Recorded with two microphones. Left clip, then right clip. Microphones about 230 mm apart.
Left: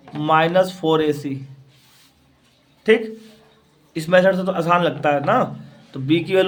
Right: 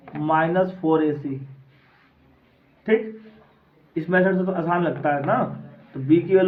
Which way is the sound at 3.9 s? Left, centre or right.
Left.